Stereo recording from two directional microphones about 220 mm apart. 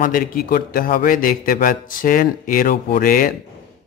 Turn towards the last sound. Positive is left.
turn(degrees=40)  # may be behind; listen again after turning